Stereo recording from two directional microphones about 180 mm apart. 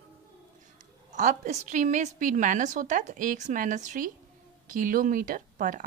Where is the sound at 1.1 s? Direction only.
45° right (ahead or behind).